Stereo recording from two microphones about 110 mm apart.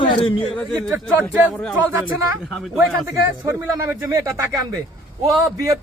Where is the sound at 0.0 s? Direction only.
50° left (ahead or behind).